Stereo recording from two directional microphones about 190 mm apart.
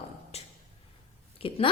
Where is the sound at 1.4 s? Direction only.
30° left (ahead or behind).